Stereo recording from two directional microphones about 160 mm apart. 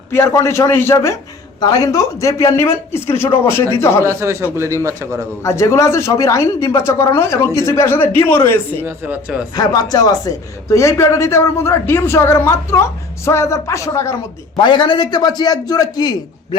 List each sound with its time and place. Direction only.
0.1 s a man's voice: 15° left (ahead or behind)
4.0 s a man's voice: 20° right (ahead or behind)
5.4 s a man's voice: 20° left (ahead or behind)
8.8 s a man's voice: 10° right (ahead or behind)
9.6 s a man's voice: 25° left (ahead or behind)
14.5 s a man's voice: 30° left (ahead or behind)